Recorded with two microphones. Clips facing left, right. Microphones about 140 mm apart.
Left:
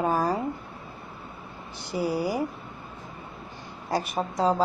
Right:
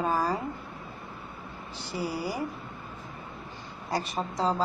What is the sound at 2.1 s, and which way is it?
Speech, 15° left (ahead or behind).